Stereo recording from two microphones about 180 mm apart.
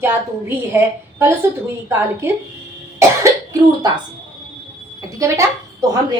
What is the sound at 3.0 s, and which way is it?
Cough, 15° right (ahead or behind).